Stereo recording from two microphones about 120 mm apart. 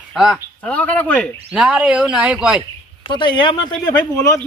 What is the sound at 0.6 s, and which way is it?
Speech, 10° left (ahead or behind).